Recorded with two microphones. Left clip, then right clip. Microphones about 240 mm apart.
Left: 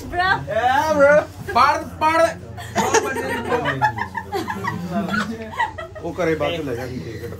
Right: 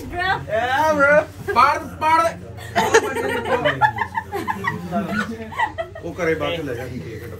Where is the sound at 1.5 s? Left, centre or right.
Left.